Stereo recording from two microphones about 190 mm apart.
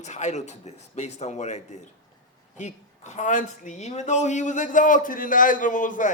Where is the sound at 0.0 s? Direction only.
40° left (ahead or behind).